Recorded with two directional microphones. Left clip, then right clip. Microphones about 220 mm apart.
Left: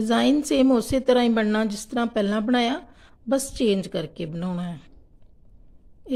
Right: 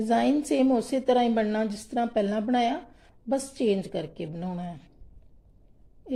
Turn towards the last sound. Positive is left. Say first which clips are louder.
# left 3 dB
turn(degrees=25)  # may be behind; listen again after turning